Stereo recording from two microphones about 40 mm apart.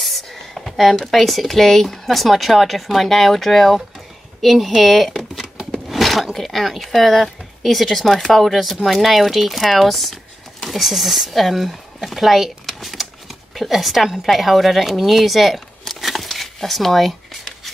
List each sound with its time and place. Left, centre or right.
0.0 s speech: centre
5.4 s a sound: centre
5.9 s a woman's voice: centre